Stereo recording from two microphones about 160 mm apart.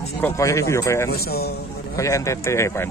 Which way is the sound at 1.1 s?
75° left (ahead or behind).